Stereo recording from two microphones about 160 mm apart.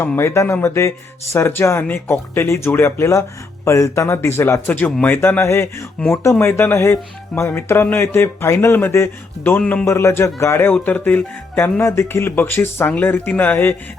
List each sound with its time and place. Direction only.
0.0 s speech: 15° left (ahead or behind)